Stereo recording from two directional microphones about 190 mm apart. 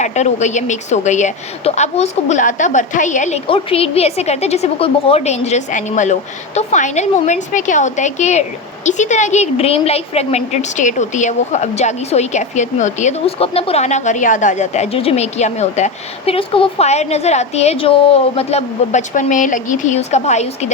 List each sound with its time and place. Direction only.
0.0 s a woman's voice: 35° left (ahead or behind)